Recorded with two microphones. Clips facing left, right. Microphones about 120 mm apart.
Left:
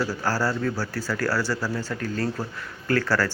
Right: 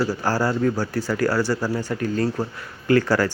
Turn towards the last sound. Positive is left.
turn(degrees=-15)  # may be behind; listen again after turning